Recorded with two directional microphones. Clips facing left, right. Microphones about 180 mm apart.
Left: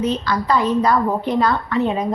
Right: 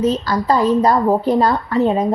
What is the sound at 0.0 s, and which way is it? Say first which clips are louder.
A woman's voice: right 3 dB; 40° right (ahead or behind).